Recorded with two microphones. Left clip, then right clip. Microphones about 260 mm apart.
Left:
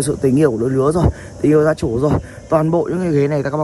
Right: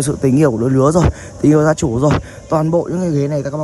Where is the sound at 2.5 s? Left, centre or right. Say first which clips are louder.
Even; centre.